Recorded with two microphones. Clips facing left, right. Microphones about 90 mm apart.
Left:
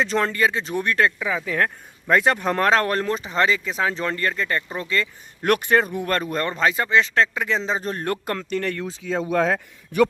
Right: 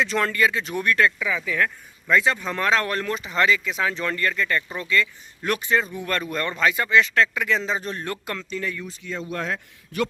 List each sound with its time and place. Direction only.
0.0 s speech: 35° left (ahead or behind)
5.4 s a man's voice: 60° left (ahead or behind)
6.1 s speech: 35° left (ahead or behind); by 8.9 s 65° left (ahead or behind)